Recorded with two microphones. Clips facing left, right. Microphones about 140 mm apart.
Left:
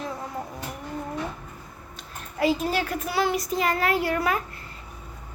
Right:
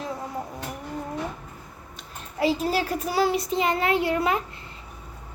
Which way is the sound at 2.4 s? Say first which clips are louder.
Even; 35° right (ahead or behind).